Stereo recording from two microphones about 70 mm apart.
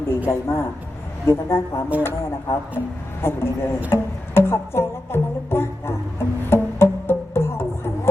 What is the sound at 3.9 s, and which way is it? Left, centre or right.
Music, left.